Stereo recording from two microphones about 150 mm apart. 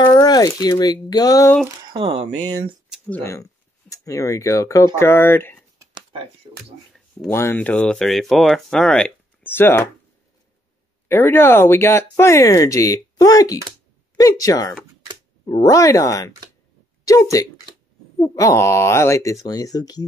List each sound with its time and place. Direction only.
0.0 s speech: 25° left (ahead or behind)
1.9 s speech: 40° right (ahead or behind)
3.1 s speech: 15° left (ahead or behind)
5.8 s a sound: 30° right (ahead or behind)
7.2 s speech: 15° left (ahead or behind)
11.1 s speech: 15° left (ahead or behind)